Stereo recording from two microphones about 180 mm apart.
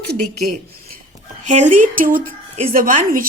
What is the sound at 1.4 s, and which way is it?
A woman's voice, 40° right (ahead or behind).